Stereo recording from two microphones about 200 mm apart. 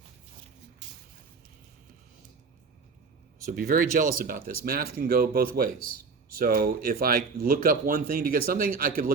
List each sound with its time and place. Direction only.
3.5 s speech: 45° right (ahead or behind)